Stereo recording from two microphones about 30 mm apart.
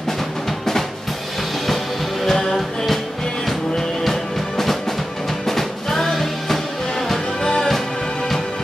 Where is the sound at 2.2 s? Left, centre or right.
Centre.